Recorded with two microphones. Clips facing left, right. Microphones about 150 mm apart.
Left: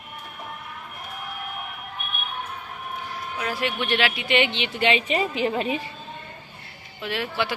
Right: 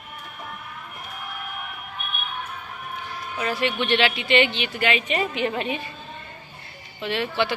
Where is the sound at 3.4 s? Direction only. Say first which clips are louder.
Right 3 dB; 5° left (ahead or behind); by 5.8 s 35° left (ahead or behind).